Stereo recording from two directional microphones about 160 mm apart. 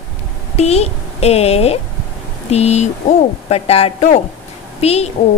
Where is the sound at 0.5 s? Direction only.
40° left (ahead or behind).